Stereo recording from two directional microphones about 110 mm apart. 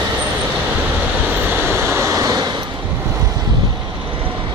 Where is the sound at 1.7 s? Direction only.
25° right (ahead or behind).